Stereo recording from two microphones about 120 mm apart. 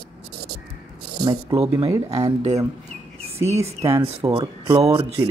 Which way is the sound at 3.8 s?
25° right (ahead or behind).